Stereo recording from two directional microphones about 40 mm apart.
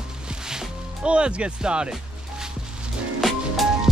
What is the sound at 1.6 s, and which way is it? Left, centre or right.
Music, right.